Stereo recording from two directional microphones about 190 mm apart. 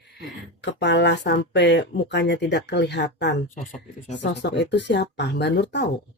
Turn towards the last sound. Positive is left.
turn(degrees=65)  # may be behind; listen again after turning